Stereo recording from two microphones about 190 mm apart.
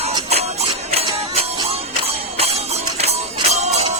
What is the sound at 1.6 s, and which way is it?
Music, 30° right (ahead or behind).